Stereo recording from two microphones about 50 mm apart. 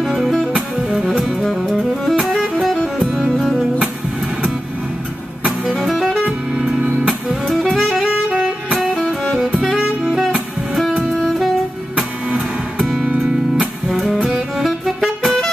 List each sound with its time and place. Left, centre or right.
0.0 s music: centre
0.8 s music: centre
2.2 s music: centre
5.8 s music: centre
6.2 s music: centre
7.7 s music: centre
8.3 s music: right
8.9 s music: centre
9.6 s saxophone: centre
11.2 s saxophone: centre
12.7 s music: centre
14.6 s saxophone: centre